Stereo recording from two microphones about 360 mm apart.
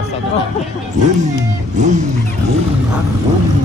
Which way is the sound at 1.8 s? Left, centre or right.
Centre.